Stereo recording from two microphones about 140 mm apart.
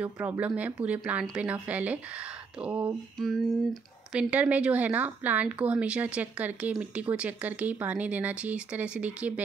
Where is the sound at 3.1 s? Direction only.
Centre (ahead or behind).